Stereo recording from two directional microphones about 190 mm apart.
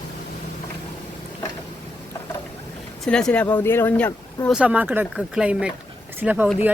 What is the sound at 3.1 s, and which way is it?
Speech, 5° left (ahead or behind).